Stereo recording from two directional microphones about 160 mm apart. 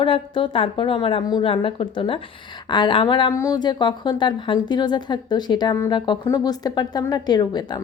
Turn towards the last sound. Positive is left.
turn(degrees=25)  # may be behind; listen again after turning